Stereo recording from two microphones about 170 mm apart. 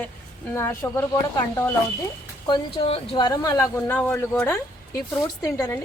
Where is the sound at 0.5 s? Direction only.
15° left (ahead or behind).